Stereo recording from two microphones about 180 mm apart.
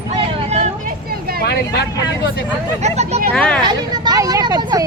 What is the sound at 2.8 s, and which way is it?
Speech, 40° right (ahead or behind).